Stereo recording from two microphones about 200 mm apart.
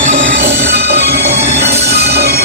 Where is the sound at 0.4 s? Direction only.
55° right (ahead or behind).